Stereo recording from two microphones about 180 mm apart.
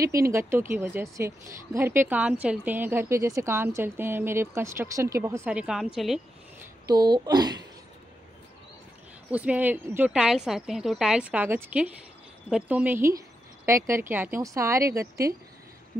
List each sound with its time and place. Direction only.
0.0 s a woman's voice: 15° right (ahead or behind); by 6.2 s centre (ahead or behind)
6.9 s a child's voice: 20° right (ahead or behind)
9.3 s a woman's voice: 10° right (ahead or behind)